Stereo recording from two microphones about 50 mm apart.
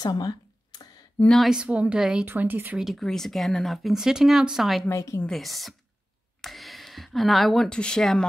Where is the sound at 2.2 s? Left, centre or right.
Right.